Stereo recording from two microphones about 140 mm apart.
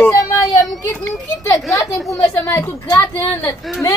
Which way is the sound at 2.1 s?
20° left (ahead or behind).